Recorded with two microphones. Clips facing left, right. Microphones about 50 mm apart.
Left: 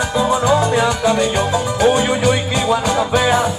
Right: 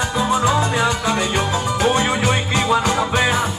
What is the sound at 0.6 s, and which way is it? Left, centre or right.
Music, centre.